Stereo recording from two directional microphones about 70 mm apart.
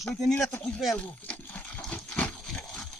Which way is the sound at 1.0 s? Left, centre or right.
Centre.